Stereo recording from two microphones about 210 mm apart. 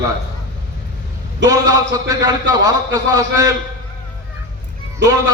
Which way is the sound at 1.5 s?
15° right (ahead or behind).